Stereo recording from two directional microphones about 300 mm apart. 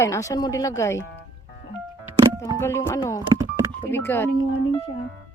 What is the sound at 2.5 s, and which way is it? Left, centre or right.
Speech, centre.